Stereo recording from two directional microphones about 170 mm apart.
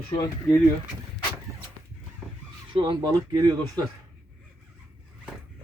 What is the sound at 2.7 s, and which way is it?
Speech, 25° right (ahead or behind).